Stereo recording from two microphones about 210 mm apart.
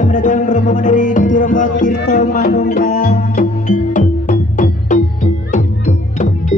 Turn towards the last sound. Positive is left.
turn(degrees=35)  # may be behind; listen again after turning